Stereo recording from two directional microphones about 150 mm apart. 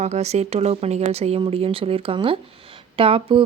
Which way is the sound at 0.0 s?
45° right (ahead or behind).